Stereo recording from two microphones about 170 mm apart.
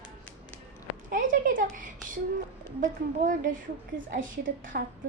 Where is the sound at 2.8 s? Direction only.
50° right (ahead or behind).